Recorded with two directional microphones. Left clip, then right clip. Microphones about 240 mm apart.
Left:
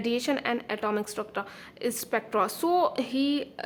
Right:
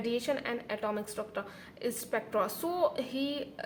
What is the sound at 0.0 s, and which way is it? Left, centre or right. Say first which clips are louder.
A woman's voice: left 4 dB; left.